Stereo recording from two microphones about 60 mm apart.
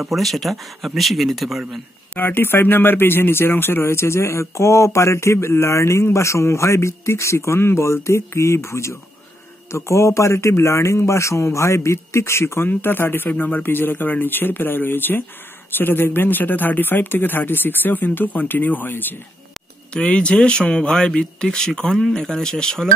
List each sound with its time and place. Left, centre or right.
0.0 s speech: centre
2.1 s a man's voice: left
12.6 s speech: left
19.9 s speech: centre